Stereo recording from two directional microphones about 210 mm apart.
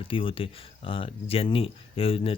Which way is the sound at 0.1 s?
25° left (ahead or behind).